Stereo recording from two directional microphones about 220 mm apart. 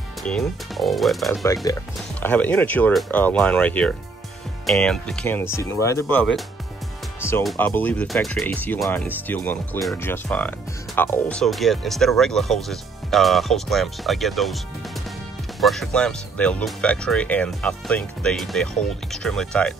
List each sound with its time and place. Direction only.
0.2 s speech: centre (ahead or behind)
1.4 s speech: 15° left (ahead or behind)
7.2 s music: 10° left (ahead or behind)
7.4 s speech: 10° left (ahead or behind)
15.6 s speech: centre (ahead or behind)